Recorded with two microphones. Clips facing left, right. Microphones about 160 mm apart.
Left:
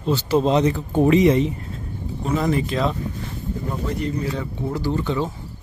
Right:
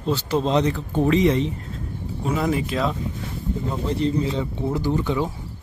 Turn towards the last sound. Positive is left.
turn(degrees=-15)  # may be behind; listen again after turning